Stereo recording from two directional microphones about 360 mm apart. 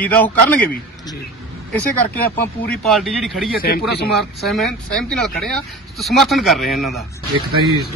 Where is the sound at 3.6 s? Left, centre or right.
Left.